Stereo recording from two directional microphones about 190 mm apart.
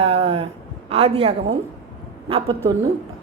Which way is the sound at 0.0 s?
30° right (ahead or behind).